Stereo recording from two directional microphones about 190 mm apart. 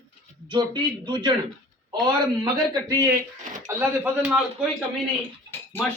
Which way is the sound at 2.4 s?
20° right (ahead or behind).